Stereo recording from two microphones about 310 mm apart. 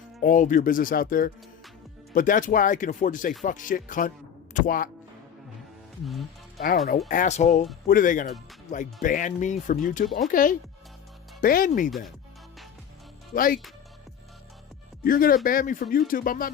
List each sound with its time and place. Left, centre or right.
0.2 s speech: left
7.1 s speech: left
11.9 s speech: centre
13.3 s speech: left
15.0 s speech: left